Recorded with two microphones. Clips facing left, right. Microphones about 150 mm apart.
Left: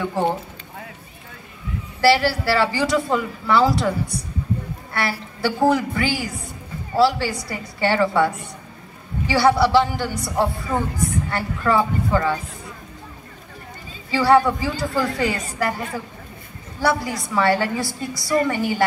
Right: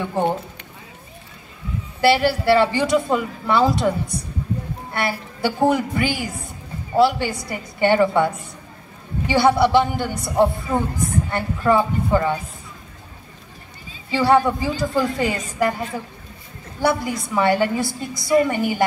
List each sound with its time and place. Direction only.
0.0 s speech: 15° right (ahead or behind)
2.0 s a woman's voice: 20° right (ahead or behind)
4.9 s a woman's voice: 20° right (ahead or behind)
9.3 s a woman's voice: 20° right (ahead or behind)
14.1 s a woman's voice: 20° right (ahead or behind)
16.8 s a woman's voice: 20° right (ahead or behind)